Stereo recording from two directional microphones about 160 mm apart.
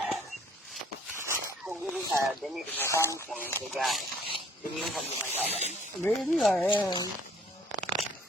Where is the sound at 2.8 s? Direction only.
15° left (ahead or behind).